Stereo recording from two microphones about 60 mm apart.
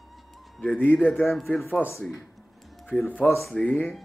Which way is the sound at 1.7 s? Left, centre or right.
Left.